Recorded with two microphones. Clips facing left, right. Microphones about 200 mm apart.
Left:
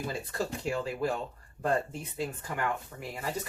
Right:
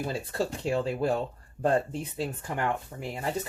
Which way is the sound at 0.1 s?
30° right (ahead or behind).